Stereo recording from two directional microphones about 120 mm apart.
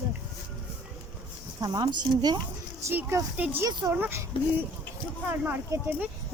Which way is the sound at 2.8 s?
25° right (ahead or behind).